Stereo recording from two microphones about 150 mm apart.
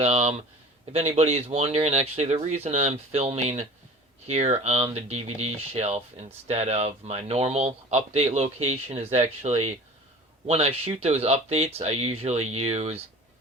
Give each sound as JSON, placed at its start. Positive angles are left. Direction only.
{"t": 0.0, "sound": "speech", "side_deg": -45}